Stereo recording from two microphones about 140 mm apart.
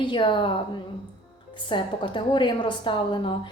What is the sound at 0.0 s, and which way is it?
A woman's voice, 35° left (ahead or behind).